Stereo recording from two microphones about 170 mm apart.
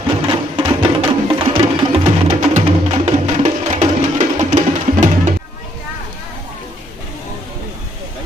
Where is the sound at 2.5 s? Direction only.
45° right (ahead or behind).